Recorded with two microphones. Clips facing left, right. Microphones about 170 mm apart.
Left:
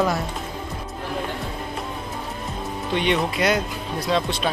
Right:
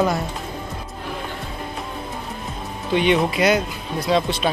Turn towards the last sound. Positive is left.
turn(degrees=0)  # may be behind; listen again after turning